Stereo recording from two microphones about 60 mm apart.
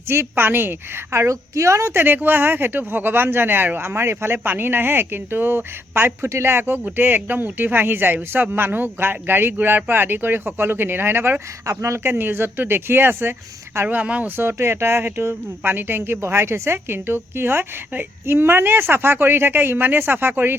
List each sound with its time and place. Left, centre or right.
0.1 s a woman's voice: right
2.0 s a woman's voice: right
6.2 s a woman's voice: right
11.6 s speech: right
12.0 s a woman's voice: right
13.8 s speech: right
14.3 s a woman's voice: right